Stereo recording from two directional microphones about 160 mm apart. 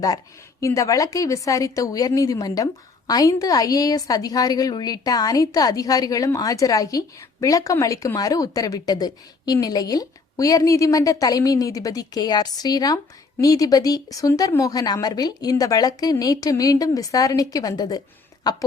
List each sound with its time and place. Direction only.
0.6 s a woman's voice: 20° left (ahead or behind)